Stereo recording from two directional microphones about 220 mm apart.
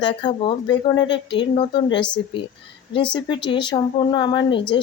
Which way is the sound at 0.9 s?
55° left (ahead or behind).